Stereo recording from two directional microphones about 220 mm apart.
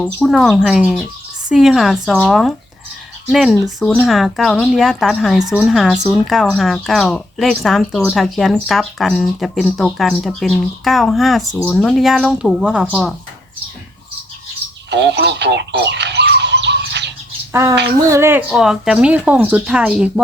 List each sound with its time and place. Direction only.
0.0 s speech: centre (ahead or behind)
14.8 s a sound: 50° right (ahead or behind)
17.5 s speech: 15° right (ahead or behind)